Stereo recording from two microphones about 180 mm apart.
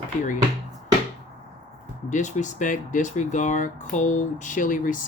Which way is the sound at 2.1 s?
40° left (ahead or behind).